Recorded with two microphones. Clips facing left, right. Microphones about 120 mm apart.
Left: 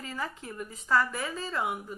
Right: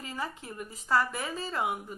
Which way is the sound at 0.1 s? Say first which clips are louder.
Even; 25° right (ahead or behind).